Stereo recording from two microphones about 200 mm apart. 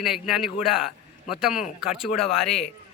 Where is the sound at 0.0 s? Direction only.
Centre (ahead or behind).